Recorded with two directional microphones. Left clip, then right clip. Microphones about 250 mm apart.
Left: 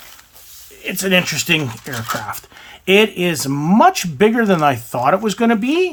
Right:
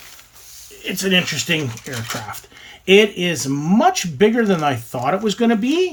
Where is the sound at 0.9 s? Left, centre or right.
Centre.